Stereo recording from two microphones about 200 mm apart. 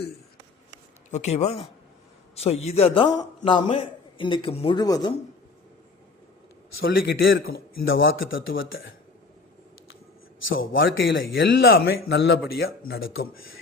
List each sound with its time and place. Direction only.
1.1 s a man's voice: 35° left (ahead or behind); by 5.1 s 20° left (ahead or behind)
6.8 s speech: 50° left (ahead or behind)
8.0 s speech: 75° left (ahead or behind)
10.6 s speech: 75° left (ahead or behind)
11.1 s speech: 50° left (ahead or behind)